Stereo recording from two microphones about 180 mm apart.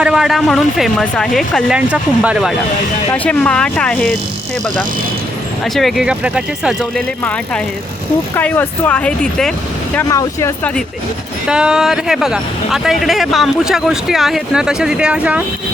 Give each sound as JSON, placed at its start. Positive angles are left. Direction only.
{"t": 0.0, "sound": "speech", "side_deg": -5}
{"t": 5.6, "sound": "speech", "side_deg": 0}
{"t": 8.4, "sound": "speech", "side_deg": 10}
{"t": 9.9, "sound": "speech", "side_deg": 15}
{"t": 11.4, "sound": "speech", "side_deg": -5}